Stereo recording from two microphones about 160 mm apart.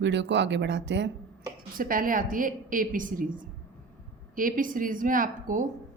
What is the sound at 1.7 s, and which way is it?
A woman's voice, 60° right (ahead or behind).